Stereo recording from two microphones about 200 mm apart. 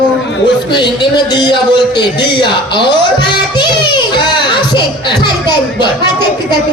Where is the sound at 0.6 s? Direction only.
20° left (ahead or behind).